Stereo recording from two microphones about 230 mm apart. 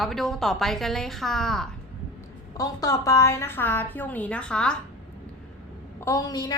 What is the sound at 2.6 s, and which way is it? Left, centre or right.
A woman's voice, centre.